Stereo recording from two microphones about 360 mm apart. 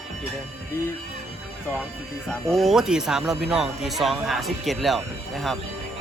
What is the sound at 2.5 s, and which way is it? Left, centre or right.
Speech, centre.